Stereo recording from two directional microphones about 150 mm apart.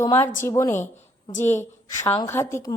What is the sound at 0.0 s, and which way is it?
A woman's voice, 15° left (ahead or behind).